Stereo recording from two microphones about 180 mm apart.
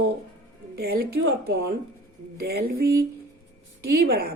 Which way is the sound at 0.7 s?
60° right (ahead or behind).